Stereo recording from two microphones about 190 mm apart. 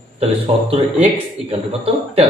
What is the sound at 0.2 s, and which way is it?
Speech, 30° right (ahead or behind).